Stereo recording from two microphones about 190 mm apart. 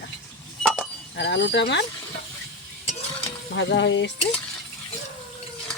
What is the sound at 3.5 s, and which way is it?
Speech, 70° left (ahead or behind).